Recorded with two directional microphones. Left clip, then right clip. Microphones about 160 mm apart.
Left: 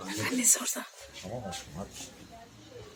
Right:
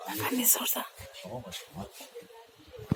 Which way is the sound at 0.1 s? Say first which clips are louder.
Left 1 dB; centre (ahead or behind).